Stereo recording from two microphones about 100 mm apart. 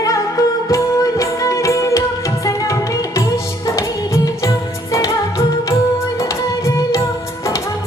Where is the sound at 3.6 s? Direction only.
35° left (ahead or behind).